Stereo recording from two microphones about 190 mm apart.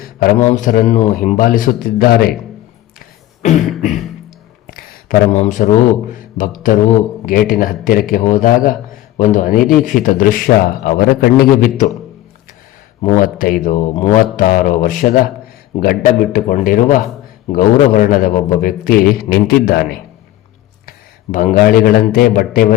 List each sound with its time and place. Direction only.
0.0 s a sound: 50° left (ahead or behind)
0.3 s a man's voice: 40° left (ahead or behind)
3.6 s beatboxing: centre (ahead or behind)
4.6 s a sound: 50° left (ahead or behind)
5.4 s a man's voice: 40° left (ahead or behind)
13.0 s a man's voice: 45° left (ahead or behind)
21.3 s a man's voice: 45° left (ahead or behind)